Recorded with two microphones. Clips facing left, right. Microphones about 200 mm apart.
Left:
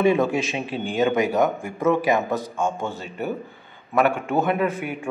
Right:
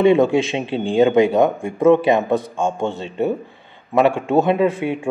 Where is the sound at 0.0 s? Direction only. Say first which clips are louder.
Right 6 dB; 25° right (ahead or behind).